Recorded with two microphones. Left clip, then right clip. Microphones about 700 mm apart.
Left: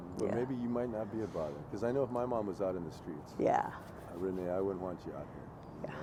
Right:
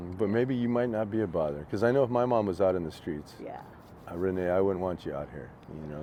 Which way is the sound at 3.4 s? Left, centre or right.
Left.